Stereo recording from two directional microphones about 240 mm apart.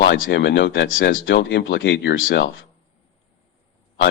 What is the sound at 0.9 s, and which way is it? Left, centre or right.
Speech, left.